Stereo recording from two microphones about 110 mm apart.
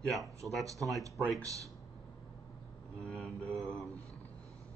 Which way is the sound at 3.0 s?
10° left (ahead or behind).